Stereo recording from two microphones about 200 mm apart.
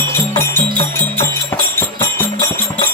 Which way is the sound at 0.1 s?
10° left (ahead or behind).